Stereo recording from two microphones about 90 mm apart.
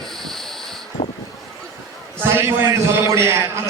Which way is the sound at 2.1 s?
25° right (ahead or behind).